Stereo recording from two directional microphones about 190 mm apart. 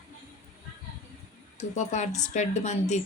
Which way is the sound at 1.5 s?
40° left (ahead or behind).